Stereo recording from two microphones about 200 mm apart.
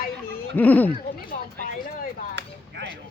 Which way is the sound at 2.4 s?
55° right (ahead or behind).